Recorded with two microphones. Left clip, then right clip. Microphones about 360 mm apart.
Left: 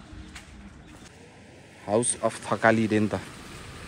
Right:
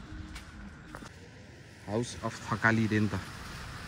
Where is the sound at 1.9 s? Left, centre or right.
Left.